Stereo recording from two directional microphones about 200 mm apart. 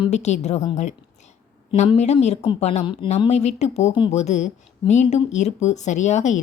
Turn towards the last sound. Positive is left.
turn(degrees=35)  # may be behind; listen again after turning